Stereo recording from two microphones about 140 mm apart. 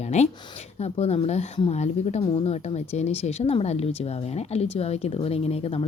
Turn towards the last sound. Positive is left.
turn(degrees=45)  # may be behind; listen again after turning